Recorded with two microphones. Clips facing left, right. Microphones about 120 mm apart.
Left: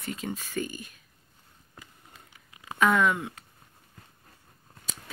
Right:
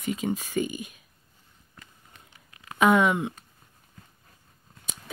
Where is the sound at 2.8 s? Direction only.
20° right (ahead or behind).